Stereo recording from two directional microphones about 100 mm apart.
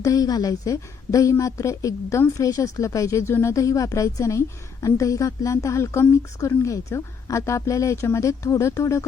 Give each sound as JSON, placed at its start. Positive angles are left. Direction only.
{"t": 0.0, "sound": "a woman's voice", "side_deg": 35}